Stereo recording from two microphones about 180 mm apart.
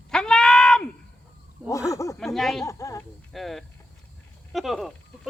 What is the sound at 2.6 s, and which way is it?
Speech, 15° left (ahead or behind).